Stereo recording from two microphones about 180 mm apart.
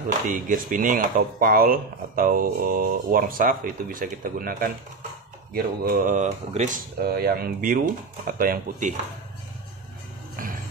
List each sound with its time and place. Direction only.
0.3 s speech: 45° right (ahead or behind)
7.2 s speech: 55° right (ahead or behind)
10.3 s music: 50° right (ahead or behind)